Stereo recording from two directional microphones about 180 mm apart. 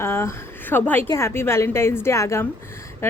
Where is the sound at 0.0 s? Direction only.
15° left (ahead or behind).